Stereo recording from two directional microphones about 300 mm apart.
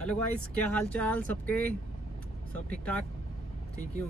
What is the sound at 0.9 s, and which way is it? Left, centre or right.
Speech, centre.